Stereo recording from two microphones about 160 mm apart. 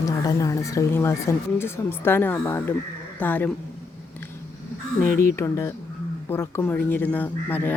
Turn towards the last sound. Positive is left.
turn(degrees=10)  # may be behind; listen again after turning